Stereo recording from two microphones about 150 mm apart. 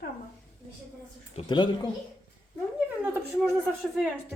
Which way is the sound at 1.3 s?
30° left (ahead or behind).